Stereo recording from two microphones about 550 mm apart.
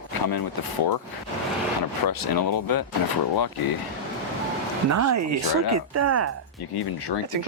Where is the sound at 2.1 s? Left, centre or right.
Left.